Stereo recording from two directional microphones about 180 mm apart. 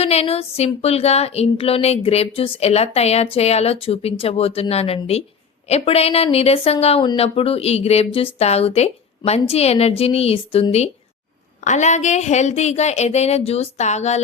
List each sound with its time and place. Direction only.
0.0 s speech: 35° left (ahead or behind)